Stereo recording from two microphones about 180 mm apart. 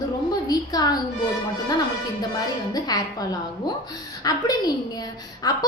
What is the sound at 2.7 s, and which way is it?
A woman's voice, 20° left (ahead or behind).